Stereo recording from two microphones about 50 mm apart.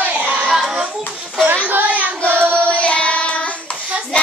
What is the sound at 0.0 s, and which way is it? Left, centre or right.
Child singing, right.